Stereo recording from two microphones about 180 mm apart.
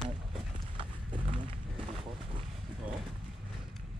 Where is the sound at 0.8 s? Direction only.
25° right (ahead or behind).